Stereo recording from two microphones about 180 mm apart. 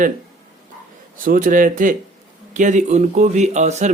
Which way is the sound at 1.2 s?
50° right (ahead or behind).